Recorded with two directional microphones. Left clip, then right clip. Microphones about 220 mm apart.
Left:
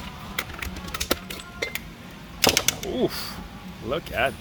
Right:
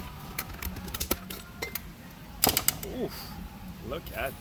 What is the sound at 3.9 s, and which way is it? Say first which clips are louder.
Speech: left 10 dB; 20° left (ahead or behind).